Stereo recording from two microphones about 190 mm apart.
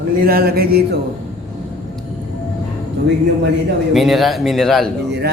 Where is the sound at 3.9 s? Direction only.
Centre (ahead or behind).